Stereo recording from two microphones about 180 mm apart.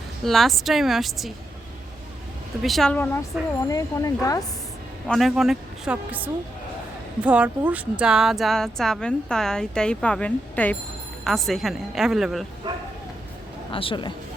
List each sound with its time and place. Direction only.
0.3 s speech: centre (ahead or behind)
2.6 s speech: centre (ahead or behind)
3.7 s speech: 20° left (ahead or behind)
5.0 s speech: centre (ahead or behind)
13.7 s speech: 30° left (ahead or behind)